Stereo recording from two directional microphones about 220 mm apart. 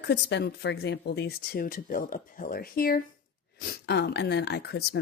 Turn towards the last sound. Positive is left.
turn(degrees=50)  # may be behind; listen again after turning